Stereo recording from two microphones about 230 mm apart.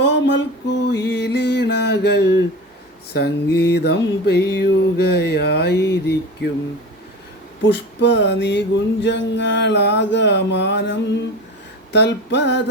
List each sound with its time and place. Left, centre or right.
0.0 s a sound: left
0.9 s music: left
7.7 s music: left